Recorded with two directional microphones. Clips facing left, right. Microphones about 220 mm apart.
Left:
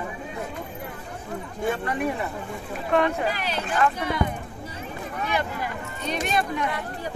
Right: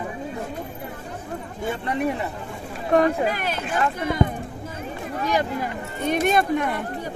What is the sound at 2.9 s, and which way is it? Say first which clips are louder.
Speech: right 4 dB; 45° right (ahead or behind).